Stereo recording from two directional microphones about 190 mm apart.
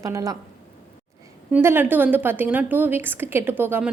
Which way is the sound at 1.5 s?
10° right (ahead or behind).